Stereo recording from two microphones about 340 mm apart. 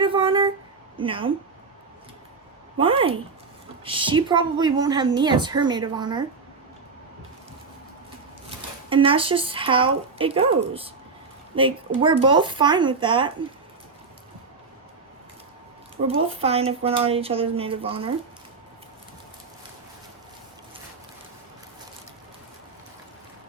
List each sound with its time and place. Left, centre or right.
0.0 s a sound: centre
0.9 s a woman's voice: centre
2.7 s a woman's voice: centre
8.4 s a woman's voice: centre
16.0 s a woman's voice: centre